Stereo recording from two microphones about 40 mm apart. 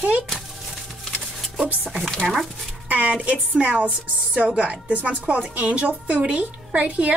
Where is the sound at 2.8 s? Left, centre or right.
Right.